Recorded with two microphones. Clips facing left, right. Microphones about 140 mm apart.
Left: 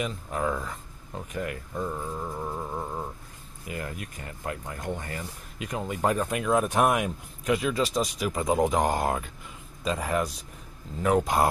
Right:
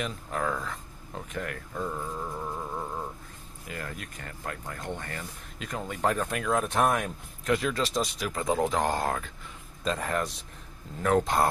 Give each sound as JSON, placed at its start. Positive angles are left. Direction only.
{"t": 0.0, "sound": "speech", "side_deg": 5}
{"t": 8.4, "sound": "speech", "side_deg": 15}